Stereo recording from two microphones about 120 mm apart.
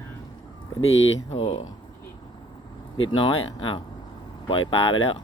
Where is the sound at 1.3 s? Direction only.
60° left (ahead or behind).